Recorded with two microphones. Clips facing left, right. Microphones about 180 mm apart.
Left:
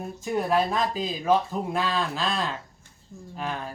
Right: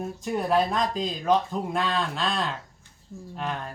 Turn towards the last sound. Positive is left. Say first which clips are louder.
# even
turn(degrees=0)  # may be behind; listen again after turning